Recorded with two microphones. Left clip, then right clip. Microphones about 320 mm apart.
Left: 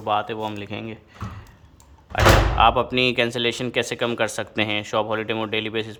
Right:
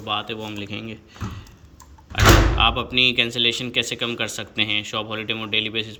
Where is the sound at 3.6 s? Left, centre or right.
Centre.